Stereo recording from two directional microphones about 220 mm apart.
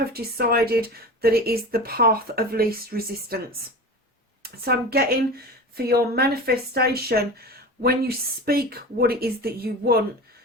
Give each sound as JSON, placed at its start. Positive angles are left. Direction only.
{"t": 0.1, "sound": "speech", "side_deg": -45}
{"t": 4.4, "sound": "speech", "side_deg": -45}